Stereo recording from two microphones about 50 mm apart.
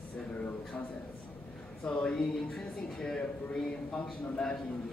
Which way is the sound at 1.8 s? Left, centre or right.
Left.